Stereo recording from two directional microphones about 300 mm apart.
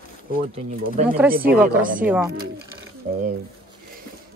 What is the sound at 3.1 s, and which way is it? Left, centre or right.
Speech, right.